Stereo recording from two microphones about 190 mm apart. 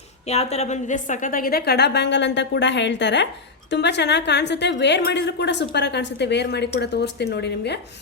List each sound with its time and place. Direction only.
0.3 s a woman's voice: 35° left (ahead or behind); by 7.8 s 60° left (ahead or behind)